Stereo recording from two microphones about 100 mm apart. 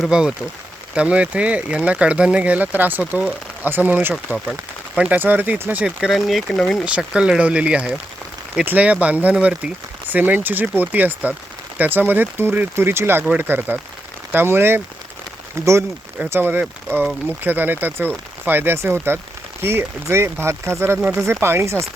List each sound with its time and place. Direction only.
0.0 s speech: 10° right (ahead or behind)
6.8 s speech: 10° right (ahead or behind); by 21.8 s 30° right (ahead or behind)